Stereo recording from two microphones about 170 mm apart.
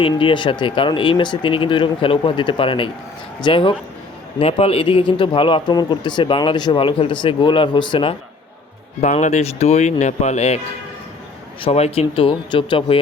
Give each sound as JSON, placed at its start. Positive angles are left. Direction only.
{"t": 0.0, "sound": "speech", "side_deg": 30}
{"t": 9.0, "sound": "speech", "side_deg": 45}
{"t": 11.6, "sound": "speech", "side_deg": 35}